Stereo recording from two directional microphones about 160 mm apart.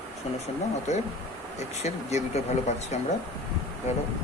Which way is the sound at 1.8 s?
45° left (ahead or behind).